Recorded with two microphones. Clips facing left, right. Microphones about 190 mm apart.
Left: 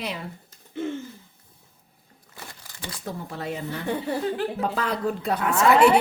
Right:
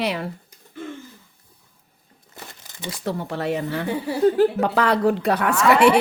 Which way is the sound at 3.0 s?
75° right (ahead or behind).